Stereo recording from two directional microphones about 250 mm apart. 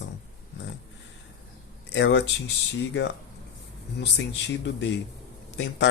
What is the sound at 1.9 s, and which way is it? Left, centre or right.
Speech, left.